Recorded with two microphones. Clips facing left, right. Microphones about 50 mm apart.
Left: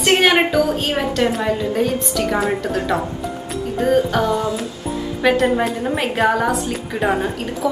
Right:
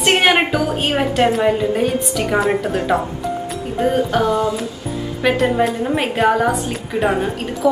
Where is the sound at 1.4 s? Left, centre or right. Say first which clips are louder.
Right 3 dB; centre.